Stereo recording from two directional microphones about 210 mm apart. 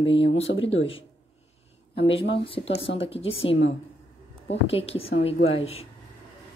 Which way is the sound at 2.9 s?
25° left (ahead or behind).